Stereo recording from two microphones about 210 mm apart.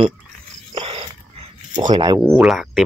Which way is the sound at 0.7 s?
25° right (ahead or behind).